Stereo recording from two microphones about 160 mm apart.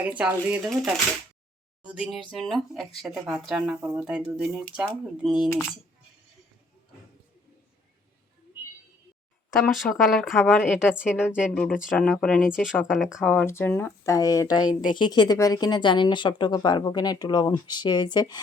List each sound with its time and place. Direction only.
0.0 s speech: 10° right (ahead or behind)
9.5 s speech: centre (ahead or behind)
11.5 s speech: 5° left (ahead or behind)
13.3 s speech: 15° left (ahead or behind)